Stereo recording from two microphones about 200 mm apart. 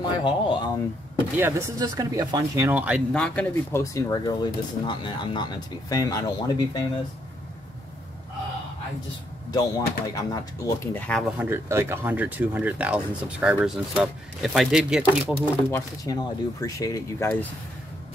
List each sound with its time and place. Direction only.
0.0 s speech: 25° left (ahead or behind)
1.3 s speech: 15° right (ahead or behind)
3.1 s speech: 5° left (ahead or behind)
9.5 s speech: 20° left (ahead or behind)
11.3 s speech: 10° right (ahead or behind)
15.7 s speech: 15° left (ahead or behind)